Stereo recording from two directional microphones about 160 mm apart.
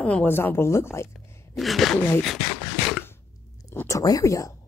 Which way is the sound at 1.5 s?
Centre (ahead or behind).